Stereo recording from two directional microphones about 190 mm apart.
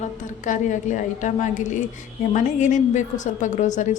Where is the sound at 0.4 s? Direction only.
40° left (ahead or behind).